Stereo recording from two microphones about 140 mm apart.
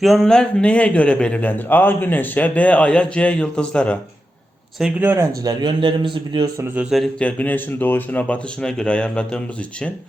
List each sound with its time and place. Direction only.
0.0 s a man's voice: centre (ahead or behind)
4.8 s a man's voice: 10° right (ahead or behind); by 6.5 s 35° right (ahead or behind)
6.9 s a man's voice: 5° left (ahead or behind)